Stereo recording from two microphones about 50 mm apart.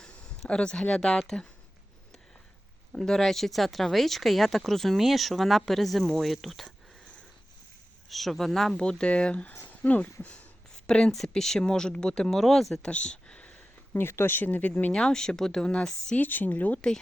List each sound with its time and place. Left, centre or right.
0.0 s speech: centre
3.0 s speech: centre
8.1 s speech: centre
8.8 s speech: centre
10.8 s speech: centre
12.8 s speech: centre
13.9 s speech: left
14.9 s speech: centre
16.1 s speech: left